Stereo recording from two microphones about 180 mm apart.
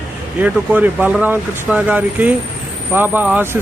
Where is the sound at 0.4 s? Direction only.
10° right (ahead or behind).